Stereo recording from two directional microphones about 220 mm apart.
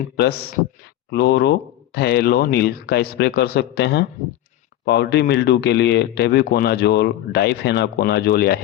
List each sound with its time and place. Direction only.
0.2 s speech: 45° left (ahead or behind)